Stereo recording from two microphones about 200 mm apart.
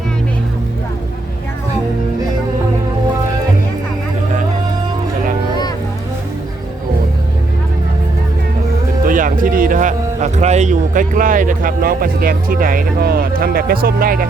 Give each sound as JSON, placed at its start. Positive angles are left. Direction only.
{"t": 9.0, "sound": "a man's voice", "side_deg": -40}